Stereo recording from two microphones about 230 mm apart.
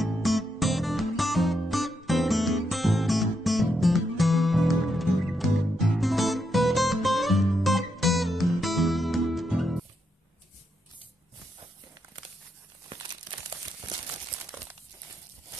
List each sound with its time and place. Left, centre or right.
0.0 s music: centre
12.9 s crumpling: centre